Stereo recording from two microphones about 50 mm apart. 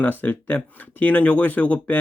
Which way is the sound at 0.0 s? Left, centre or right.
Left.